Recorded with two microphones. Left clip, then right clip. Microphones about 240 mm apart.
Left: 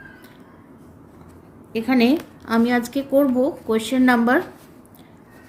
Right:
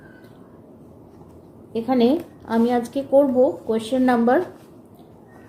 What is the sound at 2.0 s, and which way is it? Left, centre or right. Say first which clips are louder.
A woman's voice: even; left.